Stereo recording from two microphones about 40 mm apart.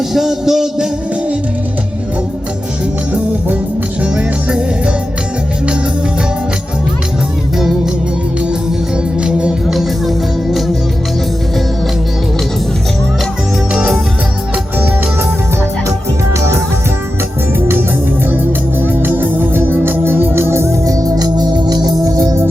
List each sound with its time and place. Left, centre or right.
0.1 s speech: centre
4.0 s music: right
9.6 s music: centre
18.8 s organ: right